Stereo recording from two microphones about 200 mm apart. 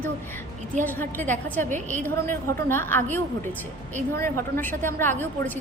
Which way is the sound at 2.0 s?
10° left (ahead or behind).